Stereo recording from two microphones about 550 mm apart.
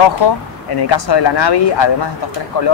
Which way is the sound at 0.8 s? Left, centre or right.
Left.